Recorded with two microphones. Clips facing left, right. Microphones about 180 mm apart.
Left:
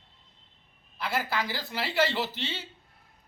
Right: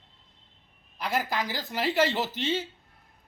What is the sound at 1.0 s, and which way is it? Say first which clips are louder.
Speech: right 2 dB; 15° right (ahead or behind).